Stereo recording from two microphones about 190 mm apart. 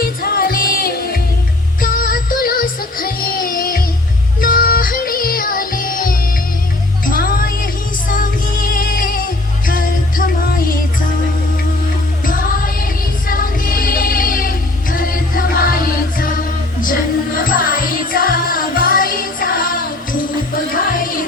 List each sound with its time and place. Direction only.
0.0 s music: 50° left (ahead or behind)
12.2 s music: 50° left (ahead or behind)